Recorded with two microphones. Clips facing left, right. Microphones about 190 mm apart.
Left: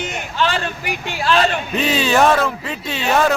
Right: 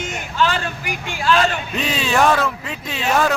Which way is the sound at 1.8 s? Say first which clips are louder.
Left 3 dB; centre (ahead or behind).